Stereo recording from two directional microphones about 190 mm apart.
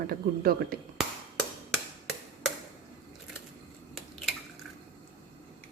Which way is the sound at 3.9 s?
Centre (ahead or behind).